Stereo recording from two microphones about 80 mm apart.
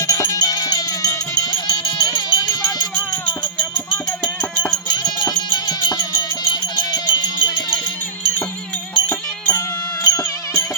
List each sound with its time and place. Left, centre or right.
0.1 s music: left
1.6 s music: left
3.6 s music: centre
4.9 s music: left
9.5 s music: left